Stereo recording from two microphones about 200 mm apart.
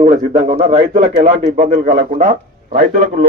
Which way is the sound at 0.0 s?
35° right (ahead or behind).